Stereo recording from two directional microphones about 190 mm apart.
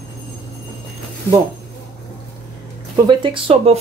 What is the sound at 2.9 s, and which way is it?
Speech, 25° right (ahead or behind).